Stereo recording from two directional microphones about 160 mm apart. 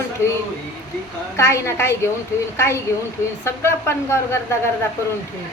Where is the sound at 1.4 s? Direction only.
15° left (ahead or behind).